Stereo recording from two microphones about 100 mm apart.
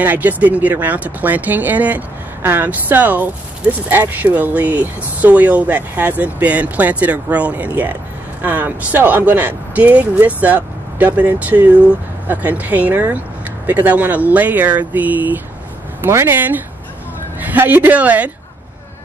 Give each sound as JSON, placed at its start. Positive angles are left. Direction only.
{"t": 0.0, "sound": "speech", "side_deg": -15}